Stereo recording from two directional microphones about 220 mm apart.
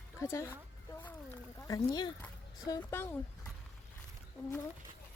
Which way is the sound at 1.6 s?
15° left (ahead or behind).